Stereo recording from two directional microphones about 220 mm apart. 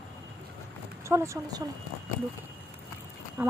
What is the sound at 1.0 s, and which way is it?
Speech, 10° right (ahead or behind).